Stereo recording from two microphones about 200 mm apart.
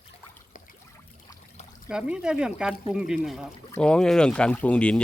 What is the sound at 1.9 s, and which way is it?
Speech, 5° right (ahead or behind).